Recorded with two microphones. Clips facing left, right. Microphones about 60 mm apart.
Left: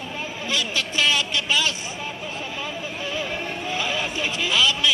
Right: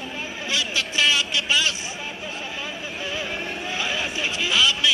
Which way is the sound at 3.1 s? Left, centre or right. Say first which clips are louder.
Left 1 dB; centre.